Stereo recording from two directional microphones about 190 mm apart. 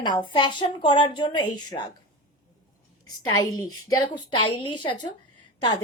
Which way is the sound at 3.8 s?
20° left (ahead or behind).